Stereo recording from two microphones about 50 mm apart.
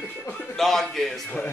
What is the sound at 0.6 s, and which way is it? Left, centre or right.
Speech, centre.